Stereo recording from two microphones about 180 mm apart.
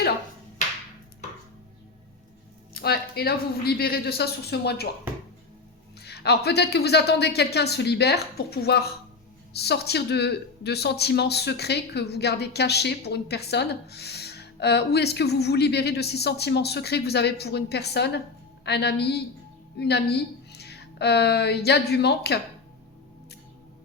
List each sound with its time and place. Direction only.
2.7 s speech: 60° left (ahead or behind)
6.0 s a woman's voice: 65° left (ahead or behind)